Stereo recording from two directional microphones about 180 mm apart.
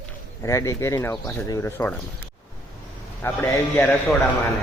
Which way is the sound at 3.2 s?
10° left (ahead or behind).